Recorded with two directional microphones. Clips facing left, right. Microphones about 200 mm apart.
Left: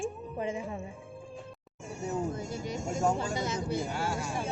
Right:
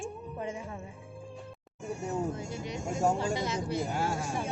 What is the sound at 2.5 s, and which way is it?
Speech, 45° left (ahead or behind).